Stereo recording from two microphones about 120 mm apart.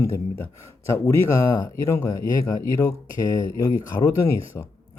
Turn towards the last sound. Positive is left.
turn(degrees=20)  # may be behind; listen again after turning